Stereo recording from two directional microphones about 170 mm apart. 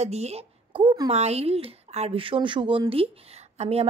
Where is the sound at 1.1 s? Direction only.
40° right (ahead or behind).